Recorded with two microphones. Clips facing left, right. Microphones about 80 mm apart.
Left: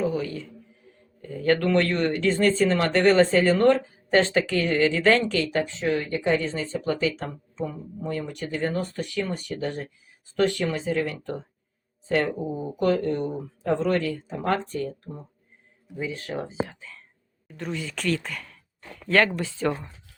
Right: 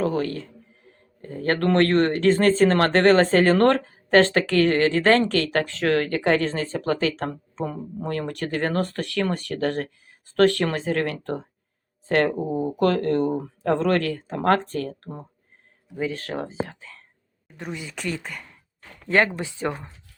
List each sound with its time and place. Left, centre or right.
0.0 s speech: right
2.6 s speech: right
16.0 s speech: right
17.6 s speech: centre
19.0 s speech: right